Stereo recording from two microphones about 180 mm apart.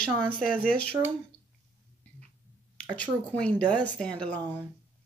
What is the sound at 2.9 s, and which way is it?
Speech, 5° left (ahead or behind).